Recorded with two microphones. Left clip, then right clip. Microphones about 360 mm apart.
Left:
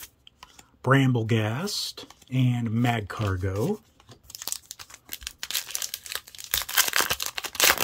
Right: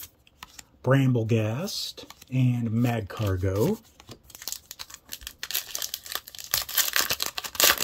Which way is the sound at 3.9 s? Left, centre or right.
Right.